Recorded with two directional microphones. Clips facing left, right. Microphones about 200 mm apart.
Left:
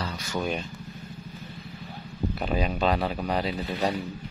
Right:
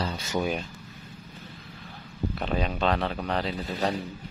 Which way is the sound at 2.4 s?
5° left (ahead or behind).